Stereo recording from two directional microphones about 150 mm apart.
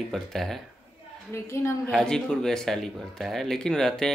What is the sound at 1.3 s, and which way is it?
Speech, 20° left (ahead or behind).